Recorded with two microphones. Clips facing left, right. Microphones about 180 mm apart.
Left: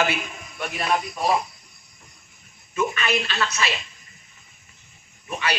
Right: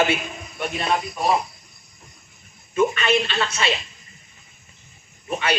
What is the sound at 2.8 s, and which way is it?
Speech, 25° right (ahead or behind).